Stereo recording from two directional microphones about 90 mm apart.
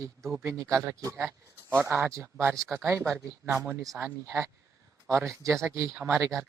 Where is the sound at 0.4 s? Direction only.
35° right (ahead or behind).